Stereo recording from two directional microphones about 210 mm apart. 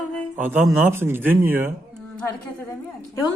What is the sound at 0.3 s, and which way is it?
Speech, 10° right (ahead or behind).